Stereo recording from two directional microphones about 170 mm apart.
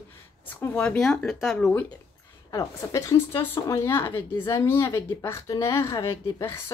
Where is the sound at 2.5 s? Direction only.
20° left (ahead or behind).